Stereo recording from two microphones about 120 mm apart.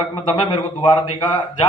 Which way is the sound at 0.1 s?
40° left (ahead or behind).